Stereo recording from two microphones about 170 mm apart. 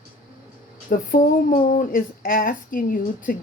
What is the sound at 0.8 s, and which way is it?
Speech, 55° left (ahead or behind).